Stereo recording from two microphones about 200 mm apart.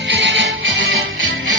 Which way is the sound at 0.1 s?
65° right (ahead or behind).